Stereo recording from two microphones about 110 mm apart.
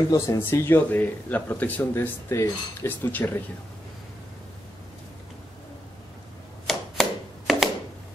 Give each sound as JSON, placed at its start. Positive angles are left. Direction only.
{"t": 0.1, "sound": "speech", "side_deg": 25}
{"t": 3.1, "sound": "speech", "side_deg": 15}
{"t": 6.7, "sound": "a sound", "side_deg": 0}